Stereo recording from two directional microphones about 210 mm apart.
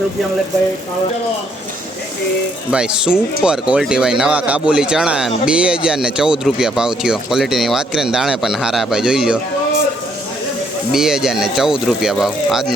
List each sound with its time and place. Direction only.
2.6 s speech: 5° right (ahead or behind)
10.9 s speech: centre (ahead or behind)